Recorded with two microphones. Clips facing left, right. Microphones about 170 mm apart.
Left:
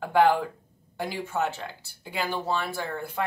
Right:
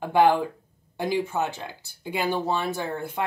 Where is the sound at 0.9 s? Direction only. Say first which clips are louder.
Right 4 dB; 15° right (ahead or behind).